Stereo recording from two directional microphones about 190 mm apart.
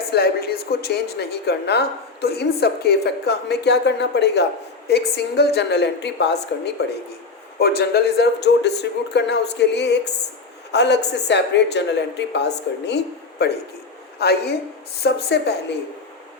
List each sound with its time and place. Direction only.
0.1 s a woman's voice: 55° left (ahead or behind)